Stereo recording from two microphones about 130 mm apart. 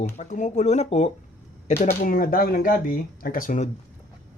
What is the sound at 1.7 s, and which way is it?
Speech, 75° left (ahead or behind).